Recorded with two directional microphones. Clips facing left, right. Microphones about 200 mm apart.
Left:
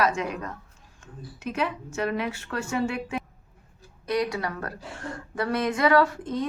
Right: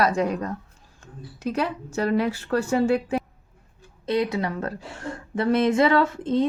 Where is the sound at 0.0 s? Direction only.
35° right (ahead or behind).